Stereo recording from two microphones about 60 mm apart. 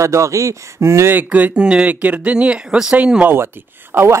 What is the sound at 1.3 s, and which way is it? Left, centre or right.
Speech, right.